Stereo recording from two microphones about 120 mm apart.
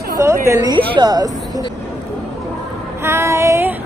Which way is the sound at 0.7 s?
40° right (ahead or behind).